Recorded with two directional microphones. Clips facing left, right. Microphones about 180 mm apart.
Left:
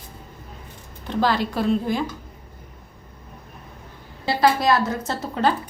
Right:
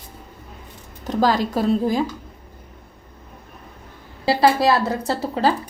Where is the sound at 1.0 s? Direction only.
40° right (ahead or behind).